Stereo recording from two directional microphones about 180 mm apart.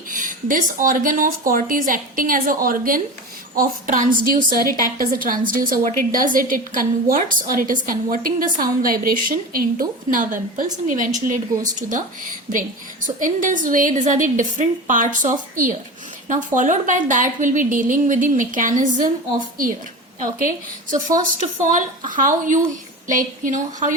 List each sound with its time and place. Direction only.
0.1 s a woman's voice: 50° right (ahead or behind)
21.4 s a woman's voice: 45° right (ahead or behind)